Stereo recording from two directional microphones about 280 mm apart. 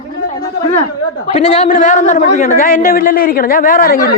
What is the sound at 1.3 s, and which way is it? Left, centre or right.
A man's voice, left.